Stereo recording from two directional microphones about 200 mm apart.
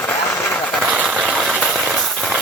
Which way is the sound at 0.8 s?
5° right (ahead or behind).